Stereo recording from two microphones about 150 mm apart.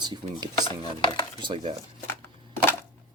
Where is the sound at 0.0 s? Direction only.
30° right (ahead or behind).